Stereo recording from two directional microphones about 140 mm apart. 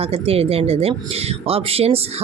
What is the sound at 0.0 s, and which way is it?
Speech, 45° right (ahead or behind).